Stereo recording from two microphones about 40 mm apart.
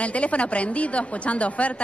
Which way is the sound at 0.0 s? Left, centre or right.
Left.